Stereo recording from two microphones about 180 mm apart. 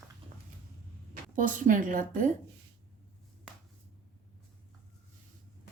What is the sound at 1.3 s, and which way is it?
Speech, 45° right (ahead or behind).